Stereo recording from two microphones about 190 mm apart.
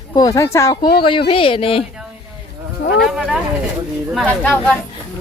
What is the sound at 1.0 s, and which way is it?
Speech, 25° left (ahead or behind).